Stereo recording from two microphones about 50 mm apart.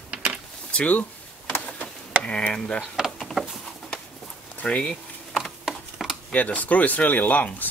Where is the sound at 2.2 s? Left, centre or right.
Centre.